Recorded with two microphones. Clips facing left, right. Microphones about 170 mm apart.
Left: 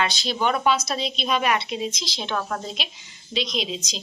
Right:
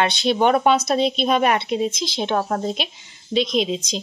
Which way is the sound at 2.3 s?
35° right (ahead or behind).